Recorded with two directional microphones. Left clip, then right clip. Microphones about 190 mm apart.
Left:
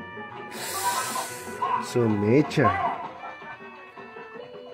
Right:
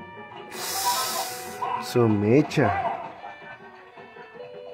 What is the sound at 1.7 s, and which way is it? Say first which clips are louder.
Speech: right 5 dB; 20° right (ahead or behind).